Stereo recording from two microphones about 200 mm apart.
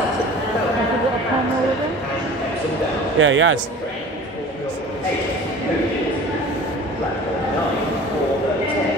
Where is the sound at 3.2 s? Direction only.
75° right (ahead or behind).